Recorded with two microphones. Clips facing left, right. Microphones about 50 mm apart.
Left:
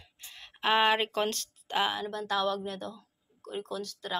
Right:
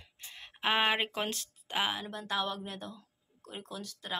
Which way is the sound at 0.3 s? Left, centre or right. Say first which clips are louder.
Left 4 dB; centre.